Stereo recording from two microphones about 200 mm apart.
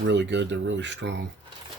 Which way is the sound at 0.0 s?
60° right (ahead or behind).